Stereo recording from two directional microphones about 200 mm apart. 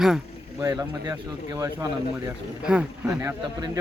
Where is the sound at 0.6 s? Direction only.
20° right (ahead or behind).